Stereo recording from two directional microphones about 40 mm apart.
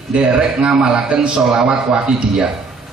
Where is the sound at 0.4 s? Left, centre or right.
Right.